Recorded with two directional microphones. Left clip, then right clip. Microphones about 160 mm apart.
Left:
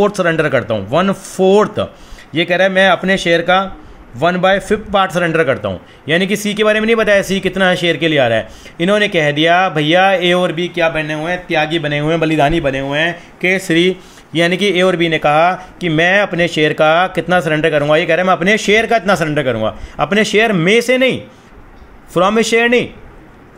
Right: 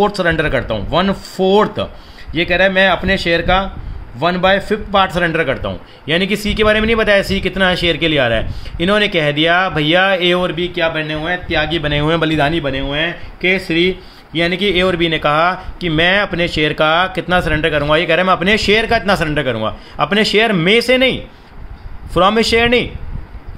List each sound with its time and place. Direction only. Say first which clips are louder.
0.0 s speech: left 1 dB; 15° left (ahead or behind)
12.0 s speech: even; 10° right (ahead or behind)
12.3 s speech: left 2 dB; 10° left (ahead or behind)
12.5 s speech: left 3 dB; 25° left (ahead or behind); by 22.8 s 5° left (ahead or behind)